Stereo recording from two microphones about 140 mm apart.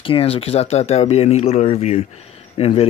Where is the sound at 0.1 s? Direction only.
45° left (ahead or behind).